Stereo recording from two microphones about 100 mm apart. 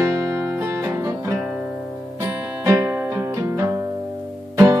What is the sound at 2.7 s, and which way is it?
Music, 30° right (ahead or behind).